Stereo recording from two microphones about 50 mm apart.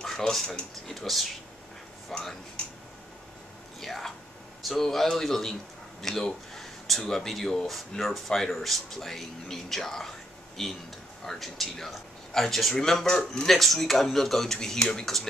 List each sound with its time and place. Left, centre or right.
0.0 s speech: centre
3.8 s speech: centre